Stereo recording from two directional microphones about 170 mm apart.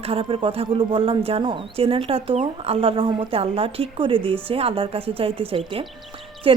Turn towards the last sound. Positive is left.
turn(degrees=-30)  # may be behind; listen again after turning